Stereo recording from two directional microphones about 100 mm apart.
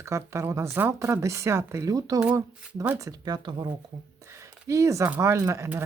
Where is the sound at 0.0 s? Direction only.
30° right (ahead or behind); by 3.7 s 45° right (ahead or behind).